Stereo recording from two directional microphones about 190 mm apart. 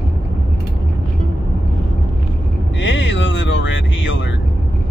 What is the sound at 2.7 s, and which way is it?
Vehicle, 75° left (ahead or behind).